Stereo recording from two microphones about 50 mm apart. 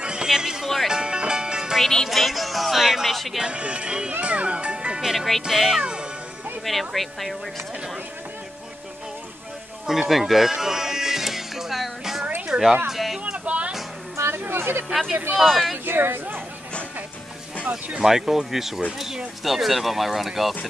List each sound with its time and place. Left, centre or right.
0.0 s music: centre
1.8 s music: centre
2.0 s speech: centre
3.4 s speech: right
5.1 s speech: centre
9.8 s music: centre
12.4 s a sound: centre
13.2 s music: right
14.1 s chatter: right
14.4 s a sound: right
15.4 s speech: centre
15.8 s a woman's voice: right
17.6 s speech: right
18.0 s speech: centre